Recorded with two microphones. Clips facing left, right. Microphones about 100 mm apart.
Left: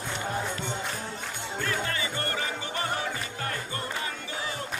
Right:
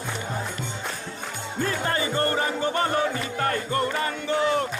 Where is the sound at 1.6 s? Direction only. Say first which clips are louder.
Right 6 dB; 35° right (ahead or behind); by 4.7 s 55° right (ahead or behind).